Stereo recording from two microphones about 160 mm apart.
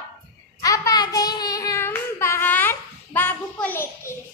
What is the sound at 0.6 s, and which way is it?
Speech, 20° left (ahead or behind).